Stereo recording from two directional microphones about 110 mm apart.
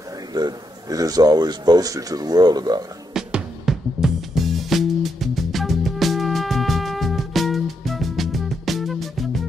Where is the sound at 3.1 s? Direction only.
5° right (ahead or behind).